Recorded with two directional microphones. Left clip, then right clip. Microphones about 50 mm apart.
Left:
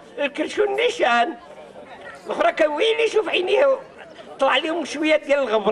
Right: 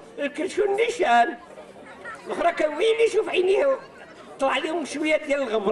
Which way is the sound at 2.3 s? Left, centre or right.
Left.